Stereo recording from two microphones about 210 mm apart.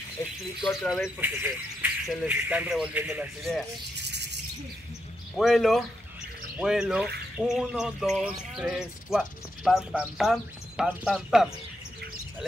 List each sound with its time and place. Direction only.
0.6 s speech: centre (ahead or behind)
4.0 s bird: 55° right (ahead or behind)
5.4 s speech: centre (ahead or behind)